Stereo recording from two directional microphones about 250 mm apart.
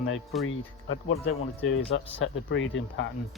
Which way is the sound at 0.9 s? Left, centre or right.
Left.